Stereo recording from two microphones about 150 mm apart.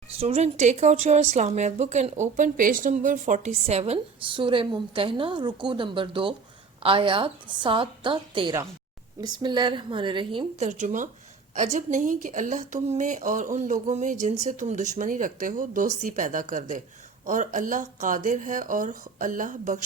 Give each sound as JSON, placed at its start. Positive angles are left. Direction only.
{"t": 0.2, "sound": "a woman's voice", "side_deg": -45}
{"t": 10.6, "sound": "a woman's voice", "side_deg": -55}